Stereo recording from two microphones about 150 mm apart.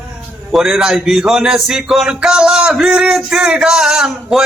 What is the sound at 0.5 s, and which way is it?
A man's voice, centre (ahead or behind).